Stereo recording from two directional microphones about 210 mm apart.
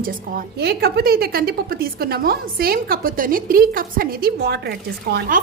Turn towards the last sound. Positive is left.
turn(degrees=-45)  # may be behind; listen again after turning